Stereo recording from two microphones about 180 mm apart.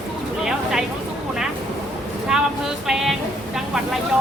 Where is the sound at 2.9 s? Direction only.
Centre (ahead or behind).